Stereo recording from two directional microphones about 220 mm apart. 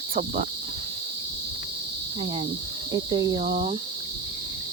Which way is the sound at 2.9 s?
15° right (ahead or behind).